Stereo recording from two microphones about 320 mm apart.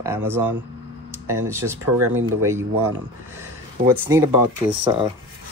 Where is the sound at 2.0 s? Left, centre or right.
Right.